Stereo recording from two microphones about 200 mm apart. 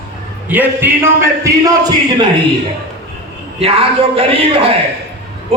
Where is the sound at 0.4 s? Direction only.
10° right (ahead or behind).